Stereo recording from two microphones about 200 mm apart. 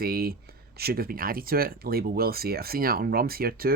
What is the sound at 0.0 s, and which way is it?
Speech, 50° right (ahead or behind).